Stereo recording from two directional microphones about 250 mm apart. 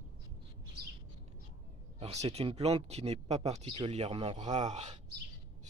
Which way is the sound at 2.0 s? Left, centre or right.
Right.